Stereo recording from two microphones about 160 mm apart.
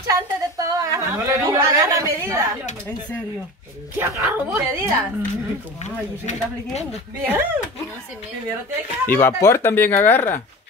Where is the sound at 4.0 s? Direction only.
15° right (ahead or behind).